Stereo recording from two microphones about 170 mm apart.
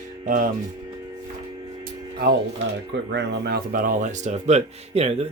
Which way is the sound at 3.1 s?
75° right (ahead or behind).